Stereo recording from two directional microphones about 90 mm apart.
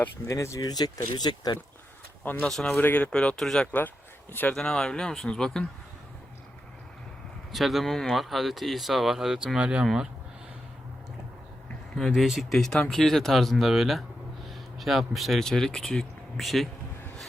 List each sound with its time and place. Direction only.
0.3 s speech: 35° left (ahead or behind)
0.7 s speech: 50° left (ahead or behind)
2.2 s speech: 20° left (ahead or behind)
2.5 s speech: 5° left (ahead or behind)
2.7 s speech: 20° left (ahead or behind)
3.7 s speech: 20° left (ahead or behind)
4.5 s speech: 5° left (ahead or behind)
7.5 s speech: centre (ahead or behind)
11.9 s speech: centre (ahead or behind)